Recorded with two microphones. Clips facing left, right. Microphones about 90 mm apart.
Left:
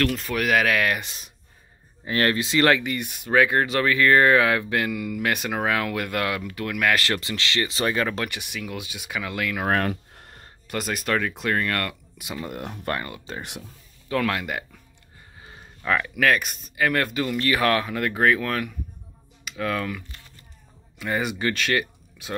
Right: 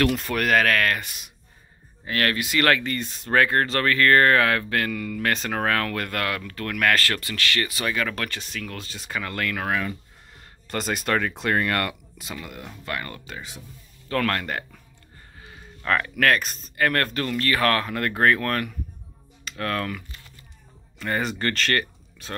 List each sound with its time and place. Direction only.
0.0 s speech: centre (ahead or behind)
7.0 s speech: 20° left (ahead or behind)
9.8 s speech: 65° left (ahead or behind)
10.7 s speech: centre (ahead or behind)
12.5 s speech: 50° left (ahead or behind)
13.3 s speech: 35° left (ahead or behind)
14.0 s speech: 5° left (ahead or behind)
15.8 s speech: 5° left (ahead or behind)
21.0 s speech: 5° left (ahead or behind)